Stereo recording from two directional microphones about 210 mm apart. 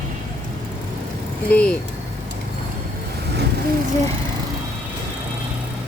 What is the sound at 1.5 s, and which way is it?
Speech, 5° left (ahead or behind).